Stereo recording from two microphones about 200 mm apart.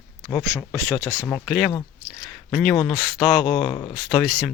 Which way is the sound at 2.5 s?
Centre (ahead or behind).